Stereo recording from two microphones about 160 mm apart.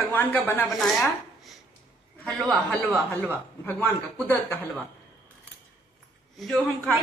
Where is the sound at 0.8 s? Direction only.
Centre (ahead or behind).